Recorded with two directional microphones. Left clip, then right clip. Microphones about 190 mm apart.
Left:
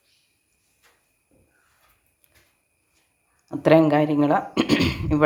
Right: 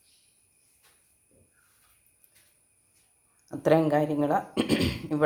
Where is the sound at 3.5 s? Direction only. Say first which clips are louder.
Left 6 dB; 15° left (ahead or behind).